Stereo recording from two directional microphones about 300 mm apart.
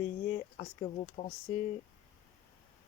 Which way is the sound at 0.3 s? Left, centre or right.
Centre.